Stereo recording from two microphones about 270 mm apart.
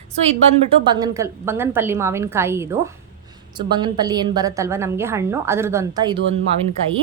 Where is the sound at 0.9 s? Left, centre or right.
Centre.